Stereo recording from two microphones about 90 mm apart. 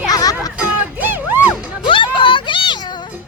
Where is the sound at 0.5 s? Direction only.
20° right (ahead or behind).